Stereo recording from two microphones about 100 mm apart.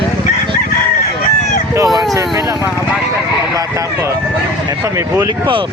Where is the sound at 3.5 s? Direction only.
30° right (ahead or behind).